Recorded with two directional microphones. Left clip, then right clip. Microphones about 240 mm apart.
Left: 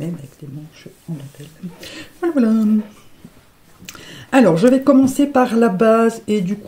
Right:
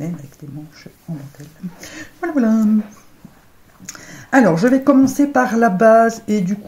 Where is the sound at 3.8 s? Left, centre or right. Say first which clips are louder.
Even; left.